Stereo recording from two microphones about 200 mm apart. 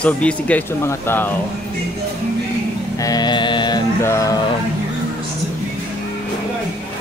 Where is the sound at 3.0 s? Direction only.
20° left (ahead or behind).